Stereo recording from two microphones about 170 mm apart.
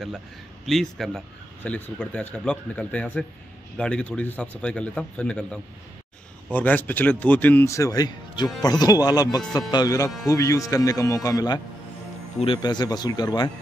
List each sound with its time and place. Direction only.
0.7 s a man's voice: centre (ahead or behind); by 11.6 s 25° left (ahead or behind)
12.6 s speech: 25° left (ahead or behind)